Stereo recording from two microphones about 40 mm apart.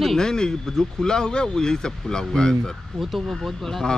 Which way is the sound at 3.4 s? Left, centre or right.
Centre.